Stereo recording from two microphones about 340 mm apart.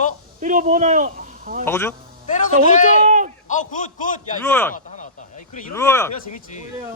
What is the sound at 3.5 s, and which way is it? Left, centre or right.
Speech, left.